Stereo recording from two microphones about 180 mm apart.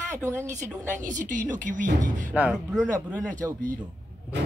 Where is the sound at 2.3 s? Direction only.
5° right (ahead or behind).